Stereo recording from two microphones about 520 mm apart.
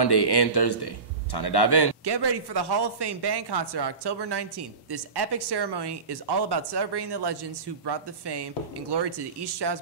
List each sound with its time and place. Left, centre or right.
0.0 s a man's voice: left
2.0 s speech: right